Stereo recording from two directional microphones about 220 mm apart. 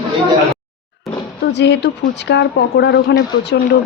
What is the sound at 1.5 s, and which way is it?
Speech, 50° left (ahead or behind).